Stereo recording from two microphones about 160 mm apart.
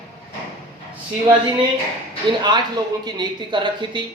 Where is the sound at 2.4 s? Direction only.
25° right (ahead or behind).